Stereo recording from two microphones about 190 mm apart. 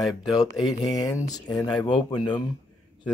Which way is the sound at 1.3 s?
20° left (ahead or behind).